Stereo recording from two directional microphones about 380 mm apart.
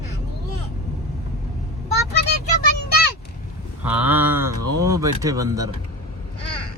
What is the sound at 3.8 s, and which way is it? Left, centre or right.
Speech, centre.